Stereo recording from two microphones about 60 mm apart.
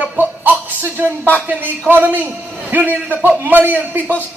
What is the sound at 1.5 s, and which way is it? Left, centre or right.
A woman's voice, right.